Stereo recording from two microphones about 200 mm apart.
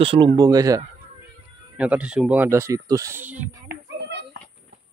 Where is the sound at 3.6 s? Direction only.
60° right (ahead or behind).